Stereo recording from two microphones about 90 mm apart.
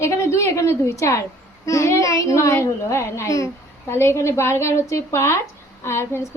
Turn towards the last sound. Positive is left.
turn(degrees=30)  # may be behind; listen again after turning